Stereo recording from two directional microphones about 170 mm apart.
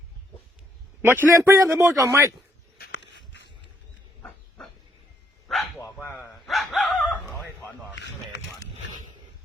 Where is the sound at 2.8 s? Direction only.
90° left.